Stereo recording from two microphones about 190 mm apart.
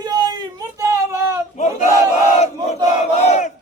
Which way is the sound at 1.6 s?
40° left (ahead or behind).